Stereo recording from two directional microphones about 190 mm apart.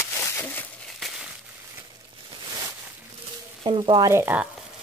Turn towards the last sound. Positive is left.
turn(degrees=-10)  # may be behind; listen again after turning